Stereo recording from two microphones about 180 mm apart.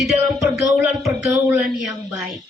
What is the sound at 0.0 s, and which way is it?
Speech, centre (ahead or behind).